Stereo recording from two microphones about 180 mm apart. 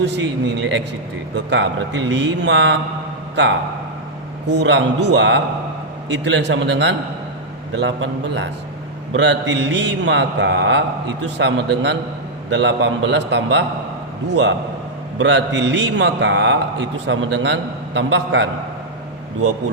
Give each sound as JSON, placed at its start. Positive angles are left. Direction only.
{"t": 0.0, "sound": "a man's voice", "side_deg": -70}
{"t": 4.4, "sound": "a man's voice", "side_deg": -75}